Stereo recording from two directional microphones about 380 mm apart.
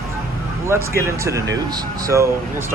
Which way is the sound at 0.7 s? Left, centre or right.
Centre.